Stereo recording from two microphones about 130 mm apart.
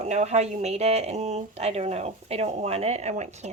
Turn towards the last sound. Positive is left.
turn(degrees=-65)  # may be behind; listen again after turning